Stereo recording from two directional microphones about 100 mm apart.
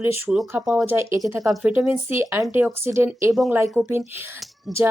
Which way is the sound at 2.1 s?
25° right (ahead or behind).